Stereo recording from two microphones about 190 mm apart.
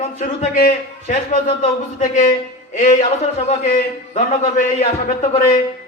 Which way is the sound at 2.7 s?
40° left (ahead or behind).